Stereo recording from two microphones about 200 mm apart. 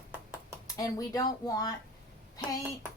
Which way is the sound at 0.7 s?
15° left (ahead or behind).